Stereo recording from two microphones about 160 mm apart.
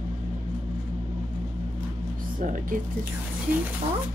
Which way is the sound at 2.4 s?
55° right (ahead or behind).